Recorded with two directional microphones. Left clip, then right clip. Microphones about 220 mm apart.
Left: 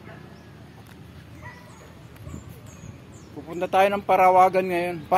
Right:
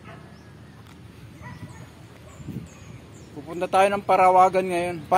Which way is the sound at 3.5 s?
15° right (ahead or behind).